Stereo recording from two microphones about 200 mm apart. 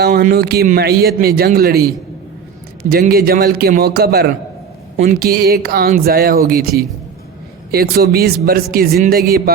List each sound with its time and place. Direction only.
0.0 s a man's voice: 50° right (ahead or behind)
2.9 s a man's voice: 50° right (ahead or behind)